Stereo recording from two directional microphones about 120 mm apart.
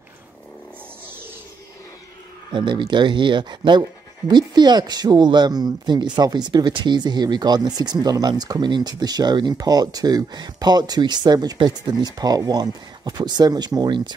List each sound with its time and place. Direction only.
2.5 s speech: 40° right (ahead or behind)